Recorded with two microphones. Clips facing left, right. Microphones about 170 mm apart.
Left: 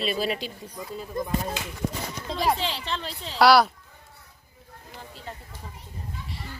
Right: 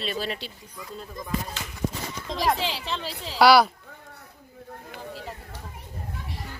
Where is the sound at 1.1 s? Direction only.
60° left (ahead or behind).